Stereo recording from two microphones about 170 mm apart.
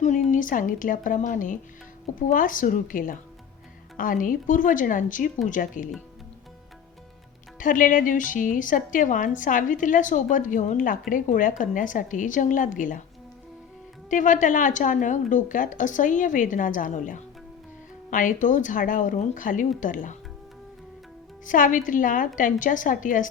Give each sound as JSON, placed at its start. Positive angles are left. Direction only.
{"t": 0.0, "sound": "a woman's voice", "side_deg": 50}
{"t": 7.6, "sound": "a woman's voice", "side_deg": 55}
{"t": 14.1, "sound": "a woman's voice", "side_deg": 50}
{"t": 21.4, "sound": "a woman's voice", "side_deg": 50}